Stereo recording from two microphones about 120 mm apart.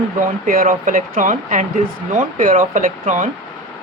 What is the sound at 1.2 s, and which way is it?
Speech, 90° right.